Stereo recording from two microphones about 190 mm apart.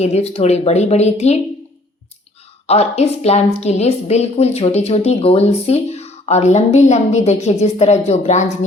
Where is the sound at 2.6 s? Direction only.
35° left (ahead or behind).